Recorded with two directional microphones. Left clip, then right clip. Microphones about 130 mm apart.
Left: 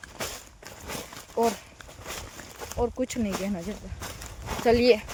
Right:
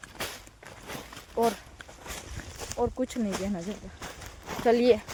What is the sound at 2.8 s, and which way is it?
Speech, 10° left (ahead or behind).